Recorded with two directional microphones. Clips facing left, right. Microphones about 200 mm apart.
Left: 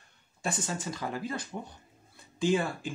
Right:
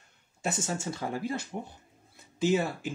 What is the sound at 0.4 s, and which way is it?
Speech, 25° right (ahead or behind).